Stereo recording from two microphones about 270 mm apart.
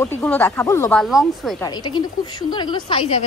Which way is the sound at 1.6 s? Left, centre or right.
Centre.